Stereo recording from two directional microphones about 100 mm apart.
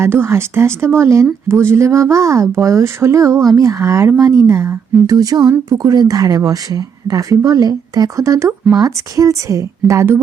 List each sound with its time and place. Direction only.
0.0 s speech: 25° right (ahead or behind)
5.0 s speech: 35° right (ahead or behind)